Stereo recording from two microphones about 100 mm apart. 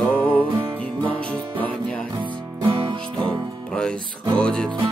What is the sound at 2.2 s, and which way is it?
Music, 60° right (ahead or behind).